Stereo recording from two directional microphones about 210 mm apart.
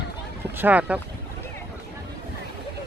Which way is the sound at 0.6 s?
5° right (ahead or behind).